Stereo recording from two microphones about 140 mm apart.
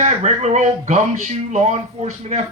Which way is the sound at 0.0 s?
55° right (ahead or behind).